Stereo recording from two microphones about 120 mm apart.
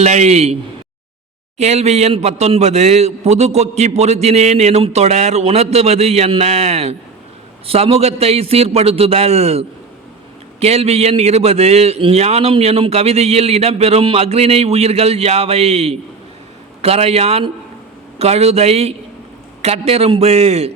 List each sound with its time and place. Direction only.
0.0 s a man's voice: 65° right (ahead or behind)
1.5 s a man's voice: 65° right (ahead or behind)